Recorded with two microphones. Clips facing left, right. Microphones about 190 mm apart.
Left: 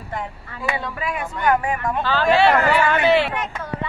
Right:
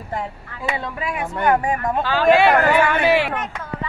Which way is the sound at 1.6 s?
35° right (ahead or behind).